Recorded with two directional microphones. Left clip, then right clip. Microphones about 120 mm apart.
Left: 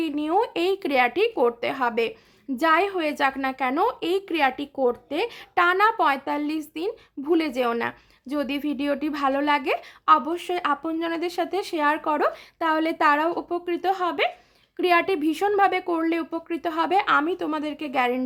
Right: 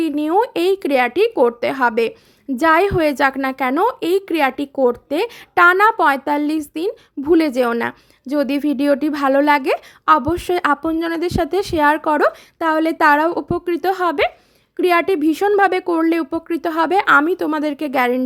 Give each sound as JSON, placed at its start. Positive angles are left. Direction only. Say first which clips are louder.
{"t": 0.0, "sound": "a woman's voice", "louder": "right 6 dB", "side_deg": -40}